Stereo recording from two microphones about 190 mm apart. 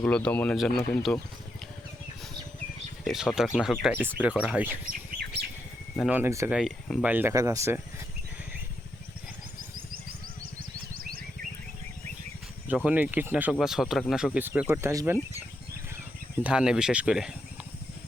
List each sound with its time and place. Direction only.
0.0 s speech: 5° left (ahead or behind)
3.0 s speech: centre (ahead or behind)
6.0 s speech: 10° right (ahead or behind)
6.5 s speech: centre (ahead or behind)
7.0 s speech: 10° right (ahead or behind)
10.9 s a sound: 50° right (ahead or behind)
12.6 s speech: 5° right (ahead or behind)
16.4 s speech: 5° right (ahead or behind)